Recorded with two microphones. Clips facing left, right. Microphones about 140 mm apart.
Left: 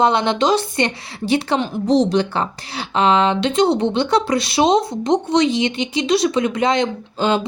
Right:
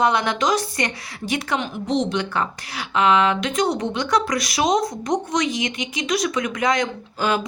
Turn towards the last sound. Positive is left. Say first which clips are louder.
# left 4 dB
turn(degrees=25)  # may be behind; listen again after turning